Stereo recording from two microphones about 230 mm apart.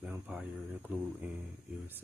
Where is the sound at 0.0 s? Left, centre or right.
Centre.